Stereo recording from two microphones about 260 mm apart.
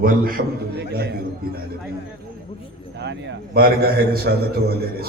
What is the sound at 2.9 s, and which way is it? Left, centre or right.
A man's voice, right.